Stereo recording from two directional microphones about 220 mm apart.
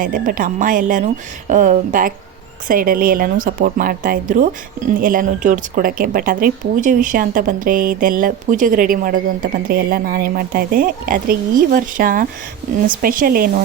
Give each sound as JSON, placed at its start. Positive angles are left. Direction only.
{"t": 0.0, "sound": "speech", "side_deg": -40}